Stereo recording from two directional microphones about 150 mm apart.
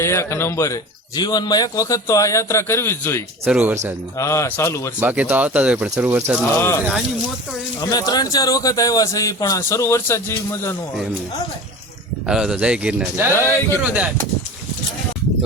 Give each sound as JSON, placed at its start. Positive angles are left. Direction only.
{"t": 0.0, "sound": "speech", "side_deg": 20}
{"t": 3.5, "sound": "speech", "side_deg": -10}
{"t": 4.2, "sound": "speech", "side_deg": 20}
{"t": 4.9, "sound": "speech", "side_deg": -10}
{"t": 6.6, "sound": "speech", "side_deg": 15}
{"t": 12.2, "sound": "speech", "side_deg": -5}
{"t": 13.3, "sound": "speech", "side_deg": 15}
{"t": 13.8, "sound": "speech", "side_deg": -10}